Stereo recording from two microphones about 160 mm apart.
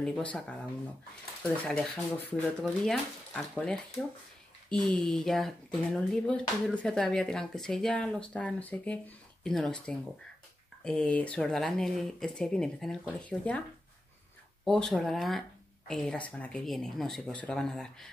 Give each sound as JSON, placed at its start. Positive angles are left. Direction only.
{"t": 0.0, "sound": "speech", "side_deg": 5}
{"t": 1.6, "sound": "speech", "side_deg": 5}
{"t": 14.6, "sound": "speech", "side_deg": 5}